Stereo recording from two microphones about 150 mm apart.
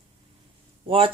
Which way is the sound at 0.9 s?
35° right (ahead or behind).